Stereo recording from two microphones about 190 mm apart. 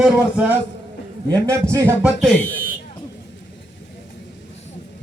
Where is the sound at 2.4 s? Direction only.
45° left (ahead or behind).